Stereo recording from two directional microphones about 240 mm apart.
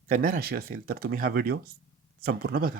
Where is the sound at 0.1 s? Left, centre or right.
Right.